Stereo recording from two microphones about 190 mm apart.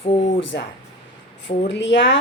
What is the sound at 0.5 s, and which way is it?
A woman's voice, 60° left (ahead or behind).